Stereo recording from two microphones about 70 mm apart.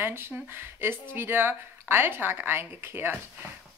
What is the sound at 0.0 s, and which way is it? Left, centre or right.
Speech, right.